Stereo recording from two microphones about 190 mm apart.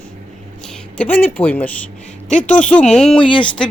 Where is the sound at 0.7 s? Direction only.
10° left (ahead or behind).